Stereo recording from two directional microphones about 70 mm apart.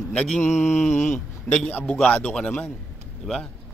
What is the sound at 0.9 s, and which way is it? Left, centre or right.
Speech, left.